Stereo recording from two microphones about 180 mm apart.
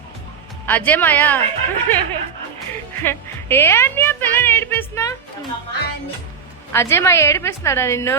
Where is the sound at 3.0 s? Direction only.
10° left (ahead or behind).